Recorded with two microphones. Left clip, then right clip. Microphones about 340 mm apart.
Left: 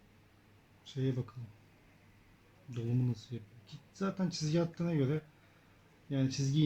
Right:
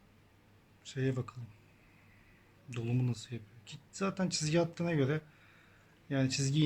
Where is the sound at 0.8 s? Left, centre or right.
Right.